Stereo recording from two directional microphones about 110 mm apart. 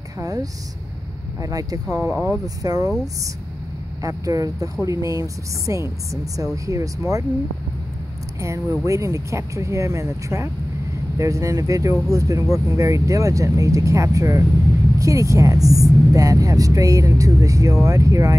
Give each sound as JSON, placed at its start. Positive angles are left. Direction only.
{"t": 0.2, "sound": "speech", "side_deg": -35}
{"t": 2.0, "sound": "speech", "side_deg": -20}
{"t": 2.4, "sound": "speech", "side_deg": -35}
{"t": 4.0, "sound": "speech", "side_deg": -30}
{"t": 8.4, "sound": "speech", "side_deg": -30}